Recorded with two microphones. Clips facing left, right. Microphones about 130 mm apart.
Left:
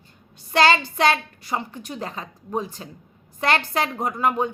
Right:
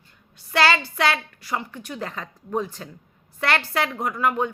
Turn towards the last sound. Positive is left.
turn(degrees=20)  # may be behind; listen again after turning